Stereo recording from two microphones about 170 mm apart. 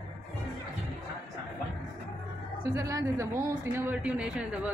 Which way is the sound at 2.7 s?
20° right (ahead or behind).